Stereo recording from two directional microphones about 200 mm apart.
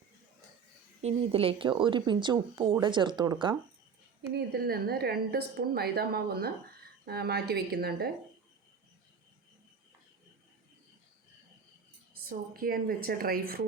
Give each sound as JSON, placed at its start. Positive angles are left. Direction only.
{"t": 1.0, "sound": "speech", "side_deg": -30}
{"t": 4.4, "sound": "a woman's voice", "side_deg": -50}
{"t": 12.1, "sound": "a woman's voice", "side_deg": -45}